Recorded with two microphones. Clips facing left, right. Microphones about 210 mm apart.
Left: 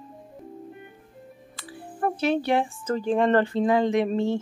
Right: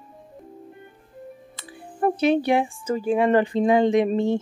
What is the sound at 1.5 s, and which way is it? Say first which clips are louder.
Speech: left 1 dB; 20° right (ahead or behind).